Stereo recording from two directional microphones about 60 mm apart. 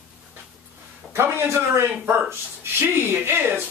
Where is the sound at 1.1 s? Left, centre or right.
Right.